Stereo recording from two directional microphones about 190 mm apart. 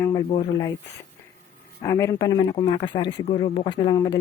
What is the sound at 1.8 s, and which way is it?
Speech, 15° left (ahead or behind).